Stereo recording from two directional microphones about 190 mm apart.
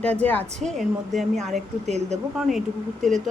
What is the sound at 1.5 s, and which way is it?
Speech, 35° right (ahead or behind).